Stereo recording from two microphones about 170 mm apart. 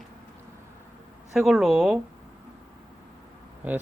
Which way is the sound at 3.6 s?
10° right (ahead or behind).